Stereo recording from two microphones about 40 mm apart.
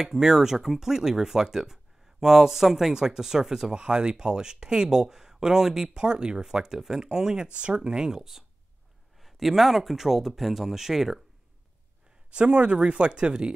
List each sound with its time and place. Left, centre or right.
0.0 s speech: centre
12.3 s speech: right